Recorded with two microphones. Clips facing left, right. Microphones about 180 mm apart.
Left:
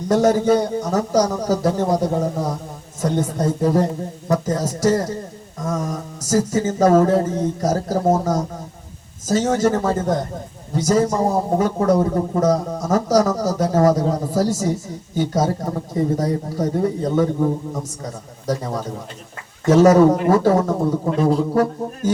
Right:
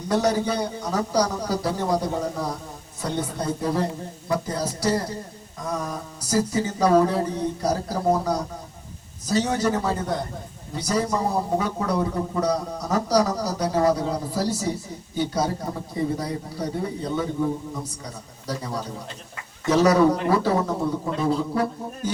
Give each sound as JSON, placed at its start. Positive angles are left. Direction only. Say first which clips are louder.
{"t": 0.1, "sound": "a man's voice", "louder": "left 7 dB", "side_deg": 45}